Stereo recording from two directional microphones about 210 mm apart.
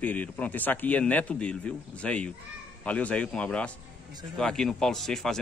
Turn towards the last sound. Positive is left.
turn(degrees=0)  # may be behind; listen again after turning